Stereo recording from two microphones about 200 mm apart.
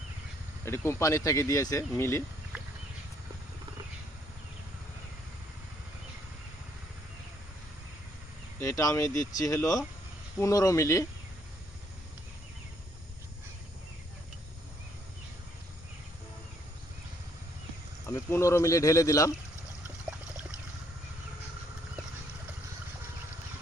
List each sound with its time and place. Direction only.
0.6 s speech: 15° left (ahead or behind)
8.6 s speech: 15° left (ahead or behind)
18.0 s speech: 10° left (ahead or behind)